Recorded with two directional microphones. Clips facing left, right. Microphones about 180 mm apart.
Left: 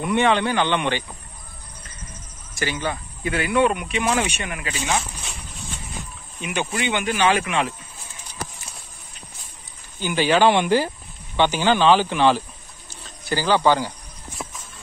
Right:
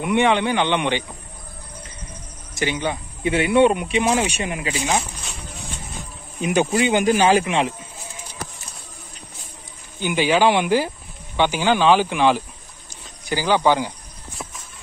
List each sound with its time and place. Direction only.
0.0 s speech: 15° right (ahead or behind)
2.6 s speech: 20° right (ahead or behind)
6.4 s speech: 35° right (ahead or behind)
9.9 s speech: 15° right (ahead or behind)